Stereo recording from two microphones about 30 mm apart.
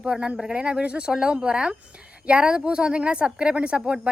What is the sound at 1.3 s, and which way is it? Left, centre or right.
Speech, right.